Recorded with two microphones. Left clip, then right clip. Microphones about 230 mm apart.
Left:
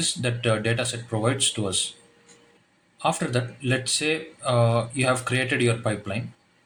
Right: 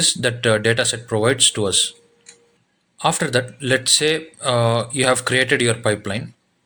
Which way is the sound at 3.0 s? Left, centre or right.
Right.